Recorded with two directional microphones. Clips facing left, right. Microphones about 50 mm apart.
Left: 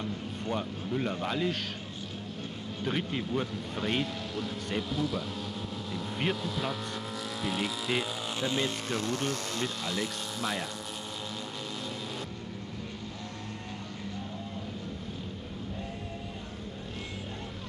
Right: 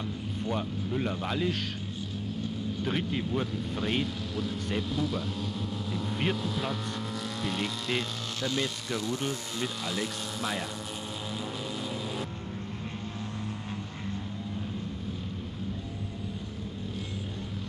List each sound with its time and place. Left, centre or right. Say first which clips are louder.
0.4 s speech: right 2 dB; centre
2.8 s speech: even; centre
8.4 s speech: even; centre
8.8 s speech: even; left
9.8 s speech: even; centre